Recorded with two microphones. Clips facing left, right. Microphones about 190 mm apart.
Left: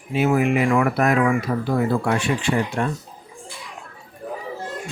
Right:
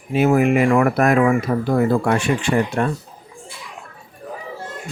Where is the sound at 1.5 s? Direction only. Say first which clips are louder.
Right 3 dB; 60° right (ahead or behind).